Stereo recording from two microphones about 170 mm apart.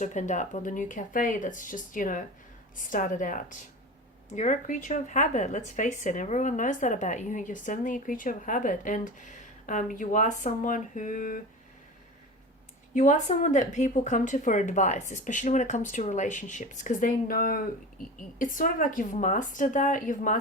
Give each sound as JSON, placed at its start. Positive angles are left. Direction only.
{"t": 0.0, "sound": "a woman's voice", "side_deg": 45}
{"t": 12.9, "sound": "a woman's voice", "side_deg": 50}